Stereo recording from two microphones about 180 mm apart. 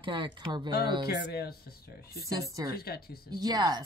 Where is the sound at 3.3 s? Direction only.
20° right (ahead or behind).